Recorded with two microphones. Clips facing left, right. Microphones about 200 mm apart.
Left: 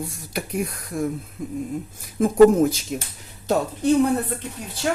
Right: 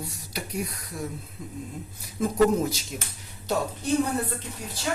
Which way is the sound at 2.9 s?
55° left (ahead or behind).